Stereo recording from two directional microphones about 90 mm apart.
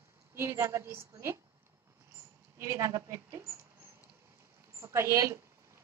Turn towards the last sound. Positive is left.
turn(degrees=-35)  # may be behind; listen again after turning